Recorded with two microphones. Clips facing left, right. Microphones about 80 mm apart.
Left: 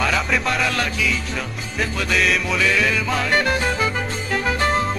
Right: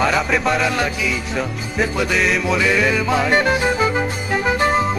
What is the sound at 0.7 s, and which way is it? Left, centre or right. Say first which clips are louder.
Music: right 2 dB; centre.